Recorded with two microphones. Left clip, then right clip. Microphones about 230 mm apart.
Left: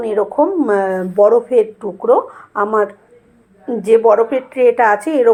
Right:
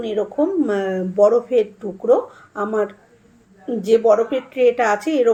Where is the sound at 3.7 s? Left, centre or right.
Centre.